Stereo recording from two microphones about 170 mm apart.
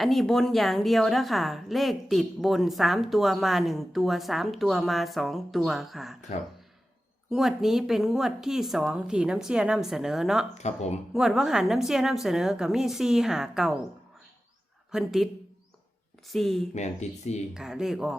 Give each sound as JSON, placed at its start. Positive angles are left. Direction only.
{"t": 0.0, "sound": "a woman's voice", "side_deg": 0}
{"t": 7.3, "sound": "a woman's voice", "side_deg": 0}
{"t": 10.5, "sound": "speech", "side_deg": 40}
{"t": 11.1, "sound": "a woman's voice", "side_deg": 0}
{"t": 14.9, "sound": "a woman's voice", "side_deg": 0}
{"t": 16.3, "sound": "a woman's voice", "side_deg": 0}
{"t": 16.7, "sound": "speech", "side_deg": 40}
{"t": 17.5, "sound": "a woman's voice", "side_deg": -5}